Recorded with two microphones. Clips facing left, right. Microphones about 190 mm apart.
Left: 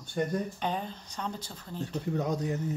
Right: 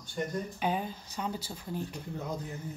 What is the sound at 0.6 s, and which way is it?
Speech, 5° right (ahead or behind).